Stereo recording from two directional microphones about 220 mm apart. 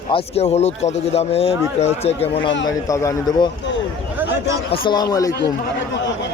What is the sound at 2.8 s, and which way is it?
Speech, 15° left (ahead or behind).